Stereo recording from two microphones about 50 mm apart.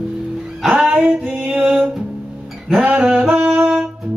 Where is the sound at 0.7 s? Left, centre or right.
Centre.